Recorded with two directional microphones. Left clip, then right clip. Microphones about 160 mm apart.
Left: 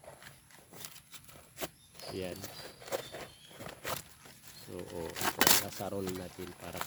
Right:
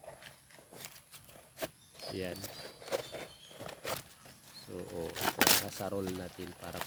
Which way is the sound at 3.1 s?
5° left (ahead or behind).